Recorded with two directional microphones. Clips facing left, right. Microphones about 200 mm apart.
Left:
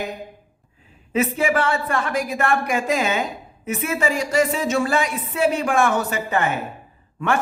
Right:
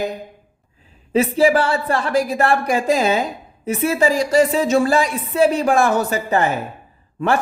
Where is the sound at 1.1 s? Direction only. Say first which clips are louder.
Right 5 dB; 35° right (ahead or behind).